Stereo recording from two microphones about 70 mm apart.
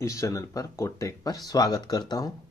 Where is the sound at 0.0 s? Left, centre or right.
Left.